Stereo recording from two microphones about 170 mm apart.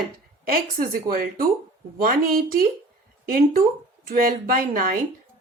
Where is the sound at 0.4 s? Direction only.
55° right (ahead or behind).